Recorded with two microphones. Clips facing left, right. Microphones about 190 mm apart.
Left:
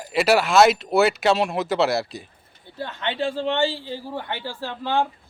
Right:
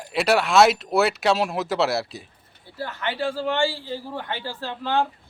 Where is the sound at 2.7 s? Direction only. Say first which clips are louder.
Left 1 dB; 25° left (ahead or behind).